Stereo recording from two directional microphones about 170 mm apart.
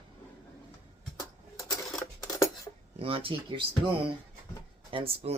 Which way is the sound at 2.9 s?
35° right (ahead or behind).